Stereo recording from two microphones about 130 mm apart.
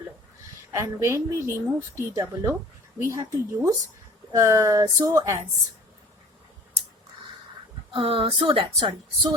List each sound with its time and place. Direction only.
0.7 s a woman's voice: 20° right (ahead or behind)
7.9 s a woman's voice: 45° right (ahead or behind)